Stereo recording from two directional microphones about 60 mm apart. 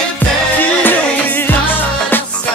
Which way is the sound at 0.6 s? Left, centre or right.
Left.